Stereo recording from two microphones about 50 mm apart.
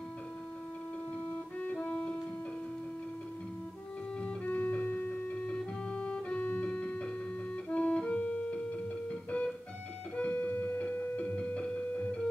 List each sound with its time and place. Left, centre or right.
1.6 s music: left
4.5 s music: left
4.9 s music: left
5.6 s music: left
11.1 s music: left